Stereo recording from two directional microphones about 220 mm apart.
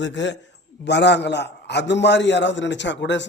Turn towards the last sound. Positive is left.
turn(degrees=55)  # may be behind; listen again after turning